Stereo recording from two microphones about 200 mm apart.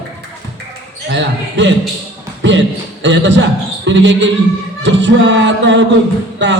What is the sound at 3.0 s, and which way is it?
Music, 65° right (ahead or behind).